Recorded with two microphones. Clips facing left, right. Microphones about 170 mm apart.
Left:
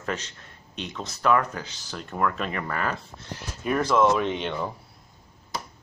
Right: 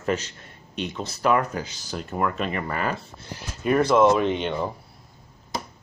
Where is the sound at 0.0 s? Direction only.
5° right (ahead or behind).